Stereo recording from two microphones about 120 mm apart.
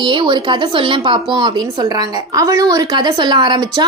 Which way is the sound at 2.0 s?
30° right (ahead or behind).